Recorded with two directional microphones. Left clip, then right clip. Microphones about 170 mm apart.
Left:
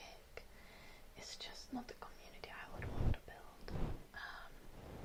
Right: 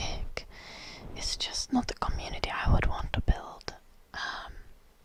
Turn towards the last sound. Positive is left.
turn(degrees=-35)  # may be behind; listen again after turning